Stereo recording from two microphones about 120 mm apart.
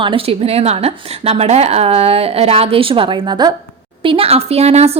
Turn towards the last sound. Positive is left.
turn(degrees=-60)  # may be behind; listen again after turning